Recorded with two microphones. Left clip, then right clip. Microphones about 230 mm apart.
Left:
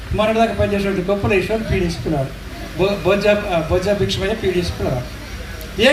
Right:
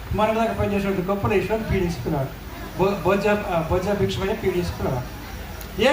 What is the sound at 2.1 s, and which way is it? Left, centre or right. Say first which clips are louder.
A man's voice: left 5 dB; right.